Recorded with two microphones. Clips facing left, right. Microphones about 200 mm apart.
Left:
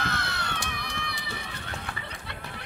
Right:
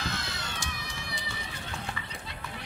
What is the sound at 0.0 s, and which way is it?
Run, 65° left (ahead or behind).